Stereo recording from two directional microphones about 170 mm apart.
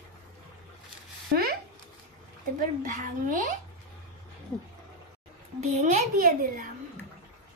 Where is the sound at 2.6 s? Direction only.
50° right (ahead or behind).